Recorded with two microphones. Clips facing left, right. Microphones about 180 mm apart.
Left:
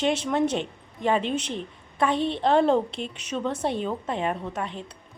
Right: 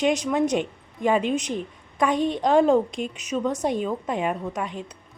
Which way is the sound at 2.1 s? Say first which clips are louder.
Right 2 dB; 45° right (ahead or behind).